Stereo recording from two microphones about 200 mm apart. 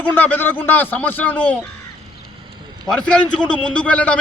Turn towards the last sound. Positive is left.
turn(degrees=5)  # may be behind; listen again after turning